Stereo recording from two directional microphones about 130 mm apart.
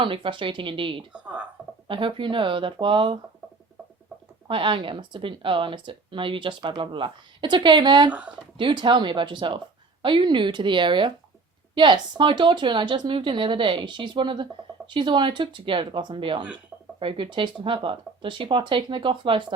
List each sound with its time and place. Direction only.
0.0 s speech: 40° right (ahead or behind)
1.1 s speech: 10° right (ahead or behind)
1.9 s speech: 40° right (ahead or behind)
4.4 s speech: 40° right (ahead or behind)